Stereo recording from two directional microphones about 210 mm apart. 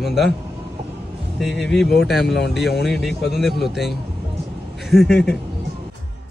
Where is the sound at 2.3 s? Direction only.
55° left (ahead or behind).